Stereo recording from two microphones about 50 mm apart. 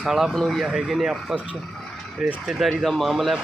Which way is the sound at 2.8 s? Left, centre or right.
Centre.